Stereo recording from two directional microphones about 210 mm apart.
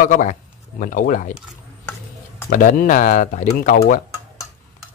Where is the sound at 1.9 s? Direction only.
10° left (ahead or behind).